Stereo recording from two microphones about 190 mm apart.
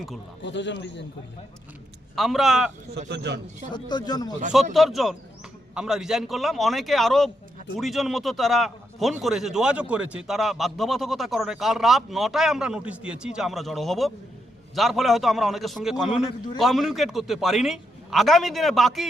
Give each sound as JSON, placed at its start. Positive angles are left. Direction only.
{"t": 0.4, "sound": "a man's voice", "side_deg": 70}
{"t": 2.1, "sound": "a man's voice", "side_deg": 0}
{"t": 3.1, "sound": "a man's voice", "side_deg": -60}
{"t": 3.7, "sound": "speech", "side_deg": 25}
{"t": 4.7, "sound": "a man's voice", "side_deg": 0}